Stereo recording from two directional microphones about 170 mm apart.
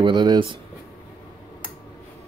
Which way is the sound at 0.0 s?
25° right (ahead or behind).